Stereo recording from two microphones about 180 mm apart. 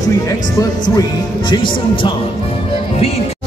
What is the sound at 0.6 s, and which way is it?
Speech, 20° left (ahead or behind).